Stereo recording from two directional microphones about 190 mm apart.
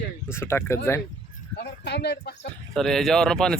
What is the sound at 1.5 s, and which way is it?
Speech, 60° left (ahead or behind).